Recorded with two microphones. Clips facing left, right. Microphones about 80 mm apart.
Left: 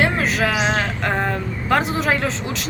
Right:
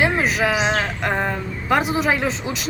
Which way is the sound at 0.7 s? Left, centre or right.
Centre.